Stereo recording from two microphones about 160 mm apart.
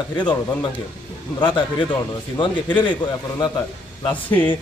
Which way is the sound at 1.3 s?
30° left (ahead or behind).